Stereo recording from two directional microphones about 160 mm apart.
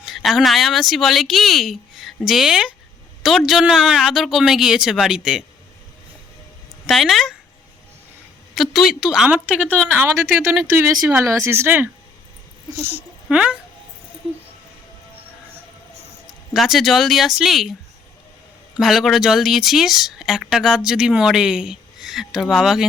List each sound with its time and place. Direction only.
0.0 s speech: centre (ahead or behind)
6.8 s speech: centre (ahead or behind)
8.5 s speech: centre (ahead or behind)
9.6 s speech: 5° left (ahead or behind)
9.9 s speech: 10° right (ahead or behind)
11.2 s speech: 15° right (ahead or behind)
16.5 s speech: centre (ahead or behind)
18.8 s speech: centre (ahead or behind)